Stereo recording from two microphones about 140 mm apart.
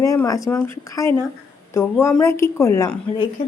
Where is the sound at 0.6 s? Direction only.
20° left (ahead or behind).